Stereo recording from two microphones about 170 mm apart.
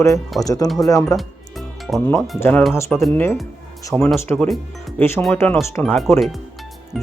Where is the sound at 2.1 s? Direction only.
Centre (ahead or behind).